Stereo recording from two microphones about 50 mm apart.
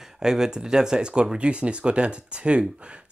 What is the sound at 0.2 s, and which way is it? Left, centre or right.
Speech, centre.